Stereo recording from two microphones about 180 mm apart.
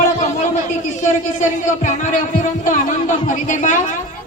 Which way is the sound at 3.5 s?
45° left (ahead or behind).